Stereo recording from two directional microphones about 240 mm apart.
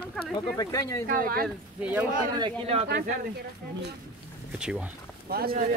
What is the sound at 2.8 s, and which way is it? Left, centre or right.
Speech, right.